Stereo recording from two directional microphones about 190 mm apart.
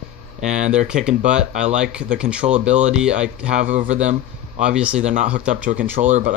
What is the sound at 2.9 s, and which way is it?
Speech, 5° right (ahead or behind).